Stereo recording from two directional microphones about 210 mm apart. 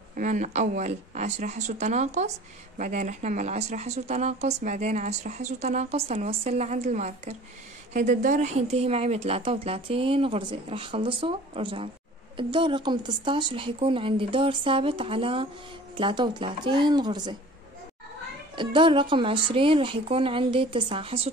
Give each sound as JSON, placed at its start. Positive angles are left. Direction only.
{"t": 0.1, "sound": "a woman's voice", "side_deg": -40}
{"t": 18.6, "sound": "a woman's voice", "side_deg": -25}